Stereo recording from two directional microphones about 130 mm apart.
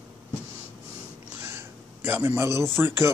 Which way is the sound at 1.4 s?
20° right (ahead or behind).